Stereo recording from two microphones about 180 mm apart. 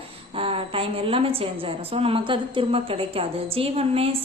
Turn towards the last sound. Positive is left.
turn(degrees=-35)  # may be behind; listen again after turning